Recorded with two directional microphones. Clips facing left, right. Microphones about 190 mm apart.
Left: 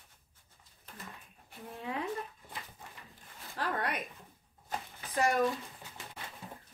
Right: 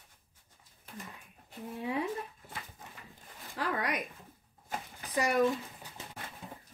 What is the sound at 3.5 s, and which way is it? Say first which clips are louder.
Speech: right 1 dB; 10° right (ahead or behind).